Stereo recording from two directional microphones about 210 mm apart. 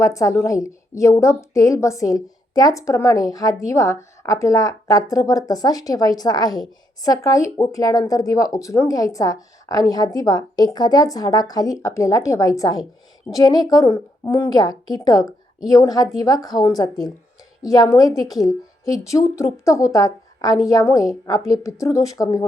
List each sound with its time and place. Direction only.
0.0 s a woman's voice: 15° left (ahead or behind)